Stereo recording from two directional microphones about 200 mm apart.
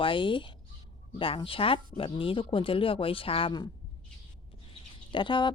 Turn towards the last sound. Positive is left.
turn(degrees=25)  # may be behind; listen again after turning